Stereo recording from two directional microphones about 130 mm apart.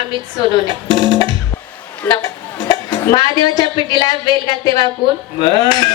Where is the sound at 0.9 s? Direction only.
35° left (ahead or behind).